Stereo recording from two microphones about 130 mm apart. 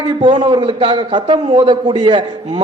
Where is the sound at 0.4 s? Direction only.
40° right (ahead or behind).